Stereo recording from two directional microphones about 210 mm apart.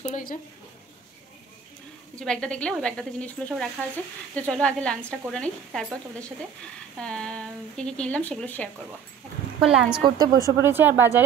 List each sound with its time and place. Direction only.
0.0 s a woman's voice: 40° left (ahead or behind)
2.1 s speech: 5° left (ahead or behind)
7.0 s speech: 5° left (ahead or behind)
9.6 s speech: 5° right (ahead or behind)
10.0 s speech: 20° right (ahead or behind)